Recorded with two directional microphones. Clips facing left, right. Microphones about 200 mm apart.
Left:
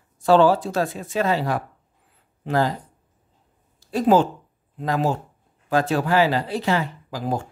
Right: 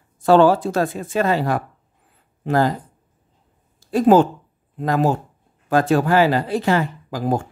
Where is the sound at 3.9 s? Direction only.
50° right (ahead or behind).